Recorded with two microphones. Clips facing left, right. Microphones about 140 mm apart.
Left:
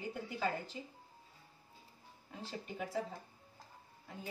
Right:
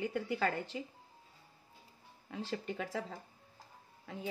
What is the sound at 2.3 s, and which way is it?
Speech, 90° right.